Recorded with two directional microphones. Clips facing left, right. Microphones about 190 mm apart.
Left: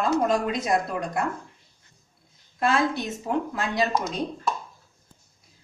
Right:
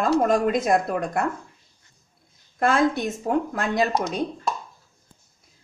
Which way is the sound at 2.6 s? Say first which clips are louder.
Right 3 dB; 50° right (ahead or behind).